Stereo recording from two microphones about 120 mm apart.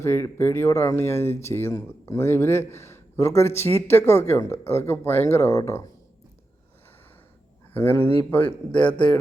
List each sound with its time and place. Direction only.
0.0 s a man's voice: 20° left (ahead or behind)
7.7 s speech: 15° left (ahead or behind)